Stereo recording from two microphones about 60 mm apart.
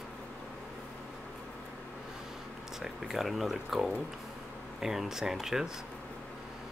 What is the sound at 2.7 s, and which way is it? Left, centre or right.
Speech, centre.